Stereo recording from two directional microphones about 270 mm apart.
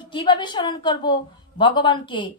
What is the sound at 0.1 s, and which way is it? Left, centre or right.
A woman's voice, centre.